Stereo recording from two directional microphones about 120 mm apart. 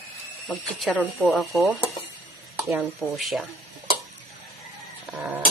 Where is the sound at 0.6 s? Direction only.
Centre (ahead or behind).